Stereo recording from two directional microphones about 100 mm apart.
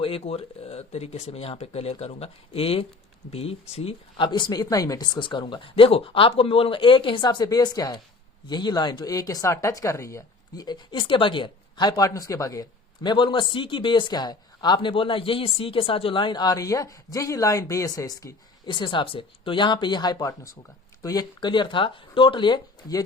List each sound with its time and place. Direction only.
0.0 s speech: 70° left (ahead or behind)
3.3 s speech: 85° left
4.3 s speech: 45° left (ahead or behind); by 10.7 s 30° left (ahead or behind)
10.7 s a woman's voice: 55° left (ahead or behind)
11.9 s speech: 40° left (ahead or behind)
13.1 s speech: 55° left (ahead or behind); by 18.3 s 35° left (ahead or behind)
18.6 s speech: 55° left (ahead or behind)